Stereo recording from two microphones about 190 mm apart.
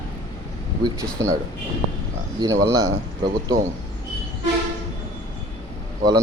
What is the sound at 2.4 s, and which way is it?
A man's voice, 15° right (ahead or behind).